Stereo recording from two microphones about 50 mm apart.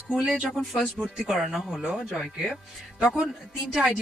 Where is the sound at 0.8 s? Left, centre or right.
Centre.